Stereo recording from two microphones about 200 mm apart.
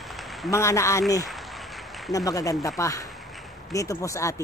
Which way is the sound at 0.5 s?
15° left (ahead or behind).